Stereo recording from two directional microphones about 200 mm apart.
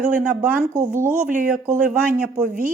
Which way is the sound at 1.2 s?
40° right (ahead or behind).